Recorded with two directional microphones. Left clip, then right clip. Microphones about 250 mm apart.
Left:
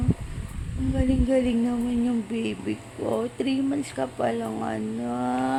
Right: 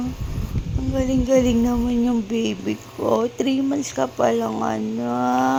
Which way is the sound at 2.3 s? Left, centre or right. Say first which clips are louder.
Right 5 dB; centre.